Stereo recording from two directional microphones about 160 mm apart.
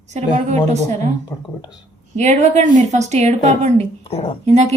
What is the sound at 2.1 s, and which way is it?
A woman's voice, 45° right (ahead or behind).